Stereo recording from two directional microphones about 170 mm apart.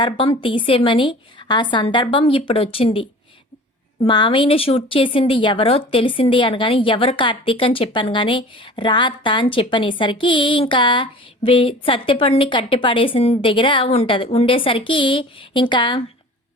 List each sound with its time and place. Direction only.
0.0 s speech: 30° left (ahead or behind)